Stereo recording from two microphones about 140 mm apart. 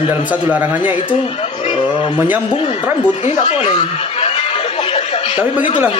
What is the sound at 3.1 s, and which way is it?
Speech, 55° left (ahead or behind).